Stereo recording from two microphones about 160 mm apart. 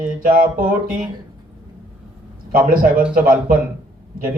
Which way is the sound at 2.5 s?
65° right (ahead or behind).